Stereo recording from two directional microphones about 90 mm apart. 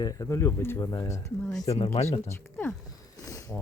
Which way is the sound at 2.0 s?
90° left.